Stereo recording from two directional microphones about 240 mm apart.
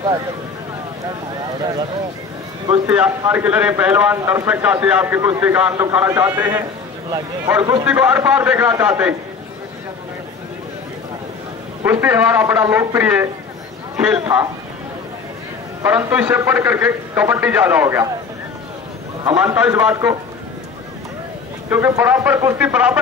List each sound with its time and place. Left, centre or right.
2.9 s a man's voice: centre
11.8 s a man's voice: centre
15.8 s speech: centre
19.2 s speech: centre
21.6 s speech: centre